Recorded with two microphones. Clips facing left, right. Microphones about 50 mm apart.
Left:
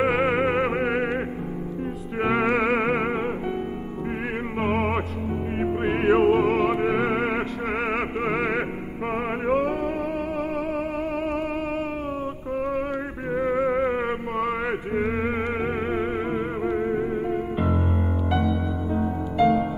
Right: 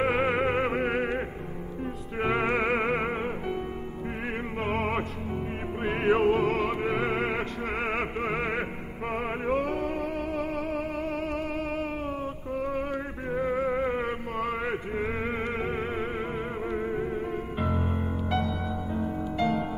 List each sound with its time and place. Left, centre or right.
0.0 s music: left
2.4 s music: left
2.9 s music: centre
4.6 s music: centre